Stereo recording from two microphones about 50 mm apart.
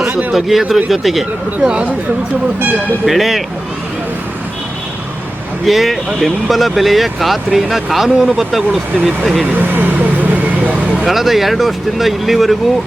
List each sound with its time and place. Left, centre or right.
0.3 s speech: centre
1.6 s speech: right
3.1 s speech: centre
5.6 s speech: centre
9.6 s speech: right
11.0 s speech: centre